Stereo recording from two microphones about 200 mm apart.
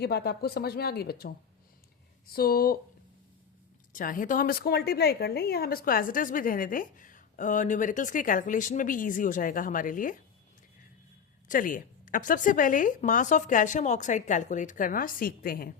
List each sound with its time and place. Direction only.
0.0 s a woman's voice: 55° left (ahead or behind)
2.3 s a woman's voice: 50° left (ahead or behind)
3.9 s a woman's voice: 45° left (ahead or behind)
11.4 s speech: 40° left (ahead or behind)